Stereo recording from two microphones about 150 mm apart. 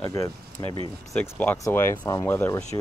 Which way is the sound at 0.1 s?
20° left (ahead or behind).